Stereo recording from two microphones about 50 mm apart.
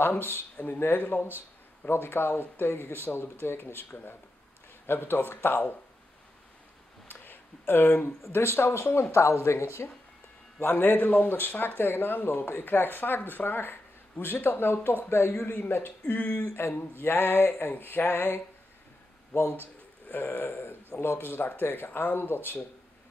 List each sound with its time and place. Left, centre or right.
0.0 s speech: left
7.1 s a sound: left
8.3 s speech: left
10.6 s speech: left
15.6 s speech: left
19.3 s speech: left
20.1 s speech: left